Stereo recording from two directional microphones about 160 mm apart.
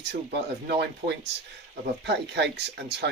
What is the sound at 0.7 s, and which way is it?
Speech, 90° right.